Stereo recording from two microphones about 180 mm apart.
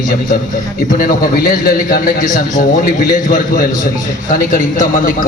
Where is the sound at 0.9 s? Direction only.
50° left (ahead or behind).